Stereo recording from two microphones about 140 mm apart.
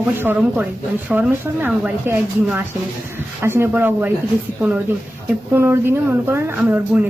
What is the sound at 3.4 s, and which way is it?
Speech, 15° right (ahead or behind).